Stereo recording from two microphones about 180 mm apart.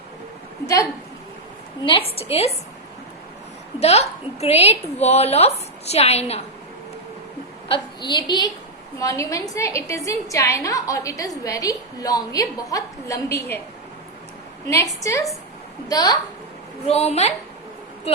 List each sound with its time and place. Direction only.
1.8 s a woman's voice: 30° left (ahead or behind)
3.8 s a woman's voice: 35° left (ahead or behind)
7.7 s a woman's voice: 25° left (ahead or behind)
14.7 s a woman's voice: 15° left (ahead or behind)
16.8 s a woman's voice: 35° left (ahead or behind)